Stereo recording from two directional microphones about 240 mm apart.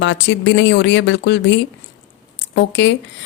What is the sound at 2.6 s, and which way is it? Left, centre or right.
Speech, left.